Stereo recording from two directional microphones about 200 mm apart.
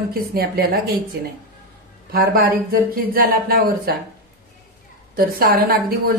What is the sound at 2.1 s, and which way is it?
Speech, 50° right (ahead or behind).